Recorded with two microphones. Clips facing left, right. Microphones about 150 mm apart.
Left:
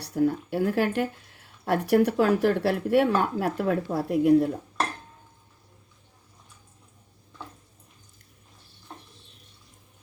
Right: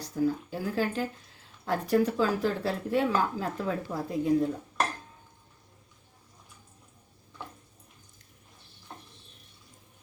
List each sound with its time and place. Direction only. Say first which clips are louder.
0.0 s a woman's voice: left 4 dB; 65° left (ahead or behind)